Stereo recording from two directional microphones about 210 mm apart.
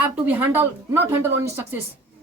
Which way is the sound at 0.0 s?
10° right (ahead or behind).